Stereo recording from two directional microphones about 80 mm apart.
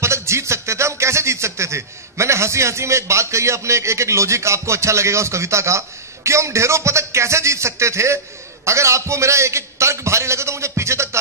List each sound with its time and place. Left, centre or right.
0.0 s music: right
8.6 s a man's voice: right